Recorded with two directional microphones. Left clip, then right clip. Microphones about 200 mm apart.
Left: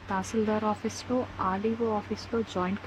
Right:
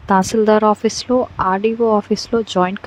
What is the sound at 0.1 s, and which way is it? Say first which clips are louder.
Speech: right 16 dB; 50° right (ahead or behind).